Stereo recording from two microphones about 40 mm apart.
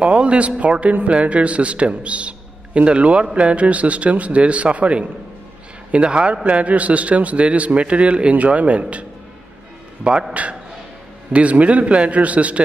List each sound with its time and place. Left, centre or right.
0.0 s a man's voice: right
10.1 s a man's voice: right
11.3 s a man's voice: right